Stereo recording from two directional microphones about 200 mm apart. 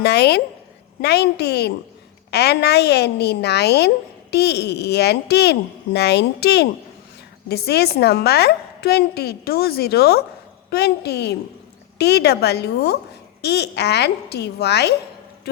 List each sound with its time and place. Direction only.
0.0 s a woman's voice: 55° left (ahead or behind)